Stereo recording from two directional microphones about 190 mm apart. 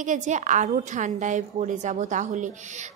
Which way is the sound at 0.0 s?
40° right (ahead or behind).